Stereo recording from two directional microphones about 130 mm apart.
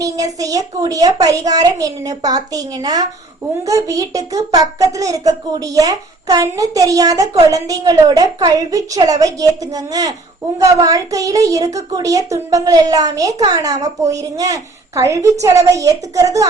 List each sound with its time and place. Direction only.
0.0 s a child's voice: 25° right (ahead or behind)